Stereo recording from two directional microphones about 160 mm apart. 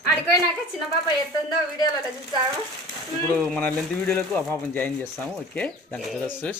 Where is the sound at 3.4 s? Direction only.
5° left (ahead or behind).